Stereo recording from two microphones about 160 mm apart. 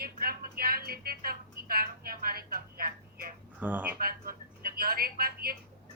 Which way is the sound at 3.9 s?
65° right (ahead or behind).